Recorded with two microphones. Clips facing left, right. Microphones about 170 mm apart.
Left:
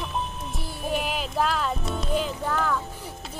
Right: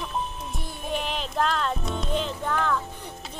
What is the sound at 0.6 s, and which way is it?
Music, 5° left (ahead or behind).